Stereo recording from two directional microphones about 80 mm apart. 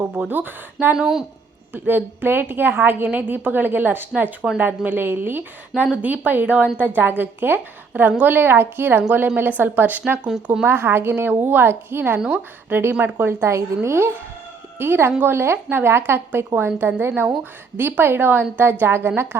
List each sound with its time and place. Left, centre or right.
0.3 s a woman's voice: right
0.9 s speech: centre
1.7 s a woman's voice: right
10.7 s a woman's voice: right